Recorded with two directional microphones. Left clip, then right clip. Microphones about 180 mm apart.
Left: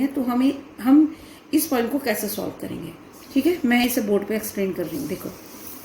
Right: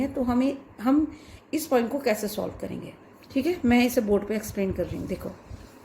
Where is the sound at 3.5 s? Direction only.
50° right (ahead or behind).